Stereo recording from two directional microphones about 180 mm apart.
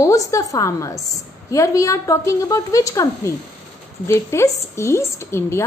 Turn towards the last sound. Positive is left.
turn(degrees=15)  # may be behind; listen again after turning